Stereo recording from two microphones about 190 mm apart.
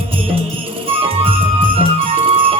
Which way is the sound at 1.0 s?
30° right (ahead or behind).